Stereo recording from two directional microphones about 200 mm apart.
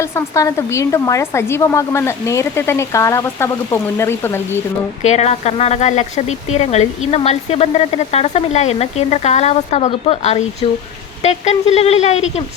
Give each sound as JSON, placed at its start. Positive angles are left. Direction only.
{"t": 0.0, "sound": "speech", "side_deg": 15}
{"t": 5.0, "sound": "speech", "side_deg": 35}